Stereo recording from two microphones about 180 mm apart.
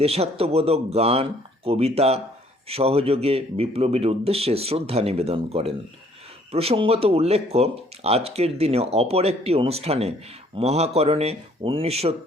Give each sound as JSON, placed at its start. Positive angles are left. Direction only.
{"t": 0.0, "sound": "speech", "side_deg": -35}